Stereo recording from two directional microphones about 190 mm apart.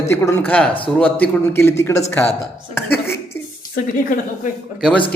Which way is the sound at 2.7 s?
10° left (ahead or behind).